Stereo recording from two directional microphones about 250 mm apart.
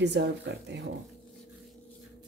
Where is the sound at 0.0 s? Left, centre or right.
Right.